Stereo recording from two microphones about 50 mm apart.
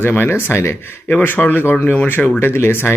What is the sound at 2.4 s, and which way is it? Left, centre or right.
Speech, left.